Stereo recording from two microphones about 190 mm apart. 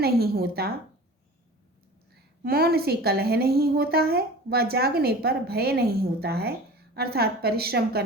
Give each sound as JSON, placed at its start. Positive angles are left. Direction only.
{"t": 0.0, "sound": "a woman's voice", "side_deg": -55}
{"t": 2.4, "sound": "a woman's voice", "side_deg": -55}